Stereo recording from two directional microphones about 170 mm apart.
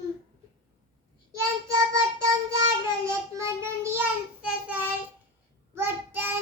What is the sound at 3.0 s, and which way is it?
Child singing, 15° right (ahead or behind).